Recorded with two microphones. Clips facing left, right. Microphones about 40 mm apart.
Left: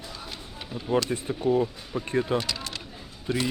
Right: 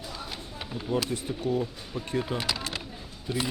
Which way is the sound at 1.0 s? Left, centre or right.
Left.